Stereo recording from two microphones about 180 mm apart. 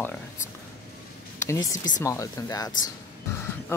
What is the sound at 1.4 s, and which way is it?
Speech, 15° left (ahead or behind).